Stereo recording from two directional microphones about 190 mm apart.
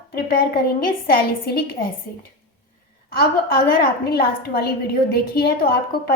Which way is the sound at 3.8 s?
55° left (ahead or behind).